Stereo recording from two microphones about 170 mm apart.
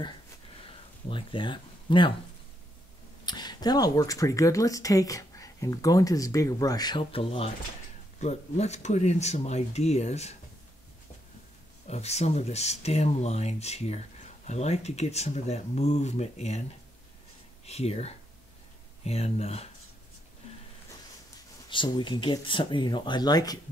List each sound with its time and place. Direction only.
1.0 s speech: 30° left (ahead or behind)
3.3 s speech: 25° left (ahead or behind)
11.9 s speech: 40° left (ahead or behind)
17.6 s speech: 40° left (ahead or behind)
21.6 s speech: 25° left (ahead or behind)